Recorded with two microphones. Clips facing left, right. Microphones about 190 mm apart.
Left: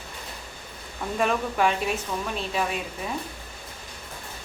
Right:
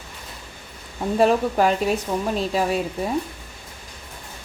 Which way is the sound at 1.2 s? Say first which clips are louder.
Right 6 dB; 35° right (ahead or behind).